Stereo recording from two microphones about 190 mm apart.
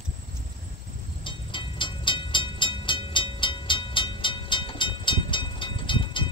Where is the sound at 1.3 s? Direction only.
25° left (ahead or behind).